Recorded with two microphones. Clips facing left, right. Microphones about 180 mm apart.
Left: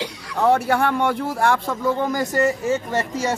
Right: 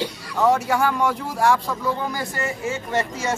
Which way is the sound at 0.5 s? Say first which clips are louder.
Left 2 dB; 60° left (ahead or behind).